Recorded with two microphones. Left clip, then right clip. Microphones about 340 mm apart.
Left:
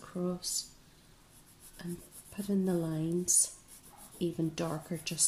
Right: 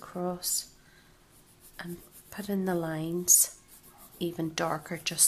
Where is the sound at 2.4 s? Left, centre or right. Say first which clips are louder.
Right 2 dB; right.